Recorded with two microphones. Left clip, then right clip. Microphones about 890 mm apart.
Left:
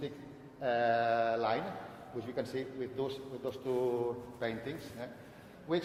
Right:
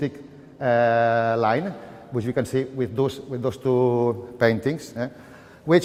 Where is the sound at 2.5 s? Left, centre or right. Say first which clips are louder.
Right 14 dB; right.